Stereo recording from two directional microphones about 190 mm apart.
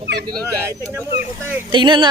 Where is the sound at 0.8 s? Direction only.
15° right (ahead or behind).